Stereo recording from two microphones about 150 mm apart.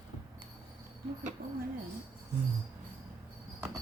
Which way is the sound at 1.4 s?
75° right (ahead or behind).